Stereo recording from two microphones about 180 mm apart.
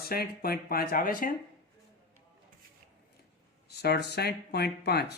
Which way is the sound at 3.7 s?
65° left (ahead or behind).